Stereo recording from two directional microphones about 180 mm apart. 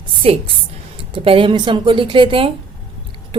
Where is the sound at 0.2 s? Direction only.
30° right (ahead or behind).